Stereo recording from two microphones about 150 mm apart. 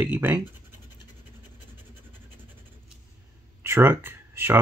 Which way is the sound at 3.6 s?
15° right (ahead or behind).